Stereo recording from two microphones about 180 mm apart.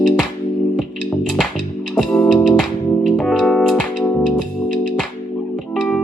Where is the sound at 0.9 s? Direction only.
50° right (ahead or behind).